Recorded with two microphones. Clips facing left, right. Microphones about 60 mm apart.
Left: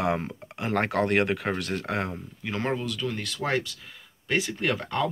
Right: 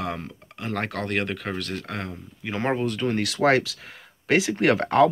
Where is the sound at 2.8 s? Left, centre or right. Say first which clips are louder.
Right 6 dB; right.